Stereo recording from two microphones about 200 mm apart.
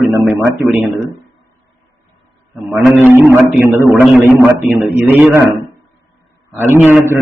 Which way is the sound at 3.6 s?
45° left (ahead or behind).